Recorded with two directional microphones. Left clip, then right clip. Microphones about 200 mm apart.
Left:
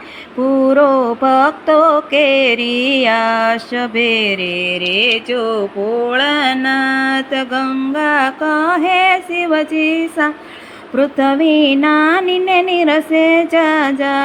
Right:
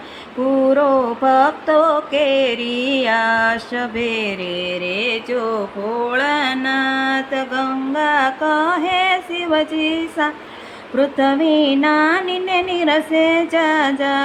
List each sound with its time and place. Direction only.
0.7 s mantra: 15° left (ahead or behind)